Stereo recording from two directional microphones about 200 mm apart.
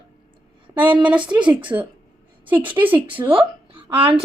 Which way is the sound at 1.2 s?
25° right (ahead or behind).